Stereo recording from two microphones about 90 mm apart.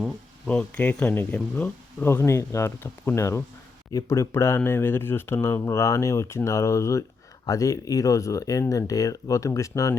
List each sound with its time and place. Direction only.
0.4 s speech: 15° left (ahead or behind); by 9.9 s 35° left (ahead or behind)